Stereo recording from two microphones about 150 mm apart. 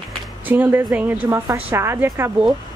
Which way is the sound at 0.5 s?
15° right (ahead or behind).